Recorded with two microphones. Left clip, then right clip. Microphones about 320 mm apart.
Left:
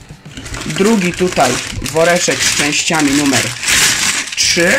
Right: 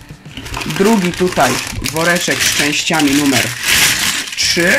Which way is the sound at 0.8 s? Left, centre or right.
Centre.